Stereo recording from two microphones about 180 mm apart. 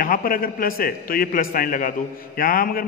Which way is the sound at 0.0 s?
50° left (ahead or behind).